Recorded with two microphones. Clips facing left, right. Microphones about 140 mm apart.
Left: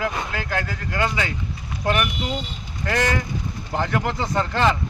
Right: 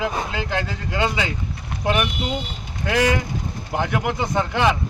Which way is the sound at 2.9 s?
10° right (ahead or behind).